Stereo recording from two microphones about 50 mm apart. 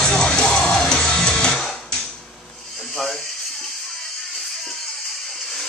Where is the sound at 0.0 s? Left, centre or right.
Centre.